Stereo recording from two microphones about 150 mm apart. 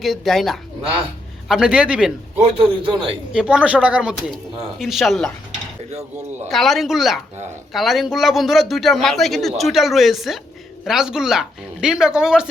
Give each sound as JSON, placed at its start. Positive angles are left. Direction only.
{"t": 0.0, "sound": "a man's voice", "side_deg": 0}
{"t": 2.8, "sound": "a man's voice", "side_deg": -35}
{"t": 3.3, "sound": "a man's voice", "side_deg": -5}
{"t": 6.5, "sound": "a man's voice", "side_deg": 0}